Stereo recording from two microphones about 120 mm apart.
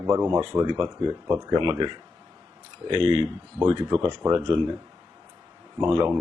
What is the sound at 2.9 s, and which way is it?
Speech, 45° right (ahead or behind).